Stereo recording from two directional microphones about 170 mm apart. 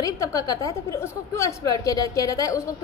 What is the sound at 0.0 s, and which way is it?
A woman's voice, 20° left (ahead or behind).